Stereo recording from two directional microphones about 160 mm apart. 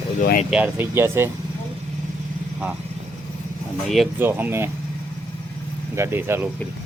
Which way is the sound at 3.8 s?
Centre (ahead or behind).